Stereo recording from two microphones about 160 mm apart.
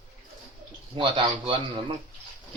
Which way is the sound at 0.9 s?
30° right (ahead or behind).